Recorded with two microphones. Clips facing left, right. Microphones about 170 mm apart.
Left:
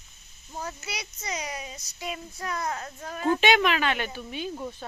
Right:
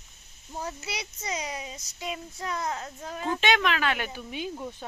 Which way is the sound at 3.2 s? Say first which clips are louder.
Left 4 dB; 10° left (ahead or behind).